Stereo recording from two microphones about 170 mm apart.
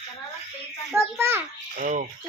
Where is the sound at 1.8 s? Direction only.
45° right (ahead or behind).